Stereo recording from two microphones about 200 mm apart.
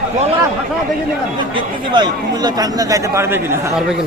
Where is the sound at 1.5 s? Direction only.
20° right (ahead or behind).